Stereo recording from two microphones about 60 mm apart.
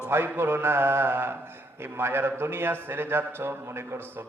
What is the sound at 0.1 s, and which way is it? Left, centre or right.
A man's voice, right.